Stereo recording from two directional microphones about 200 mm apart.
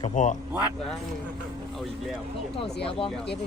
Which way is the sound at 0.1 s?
40° left (ahead or behind).